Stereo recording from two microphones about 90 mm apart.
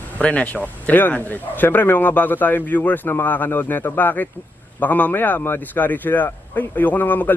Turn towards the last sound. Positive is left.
turn(degrees=20)  # may be behind; listen again after turning